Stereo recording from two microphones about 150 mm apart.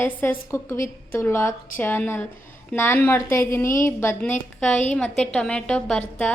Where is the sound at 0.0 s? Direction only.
15° left (ahead or behind).